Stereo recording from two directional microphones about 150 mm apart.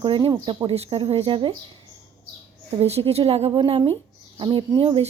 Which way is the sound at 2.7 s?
40° right (ahead or behind).